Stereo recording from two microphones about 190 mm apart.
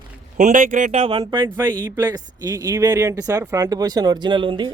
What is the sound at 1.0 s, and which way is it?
Speech, 25° right (ahead or behind).